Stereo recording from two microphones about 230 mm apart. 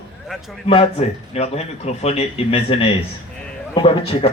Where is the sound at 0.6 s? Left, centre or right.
Left.